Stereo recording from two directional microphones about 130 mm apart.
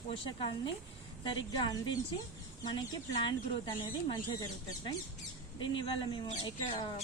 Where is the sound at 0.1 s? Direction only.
40° left (ahead or behind).